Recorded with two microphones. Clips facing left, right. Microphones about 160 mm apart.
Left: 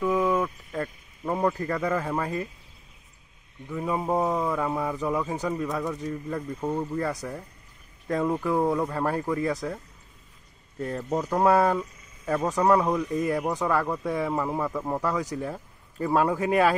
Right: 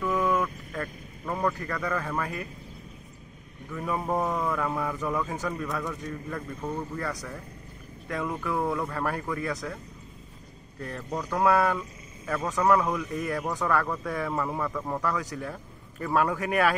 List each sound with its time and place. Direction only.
0.2 s speech: 25° left (ahead or behind)
3.7 s speech: 20° left (ahead or behind)
10.8 s speech: 25° left (ahead or behind)